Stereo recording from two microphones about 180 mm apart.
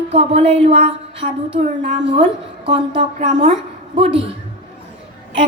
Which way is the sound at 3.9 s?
35° right (ahead or behind).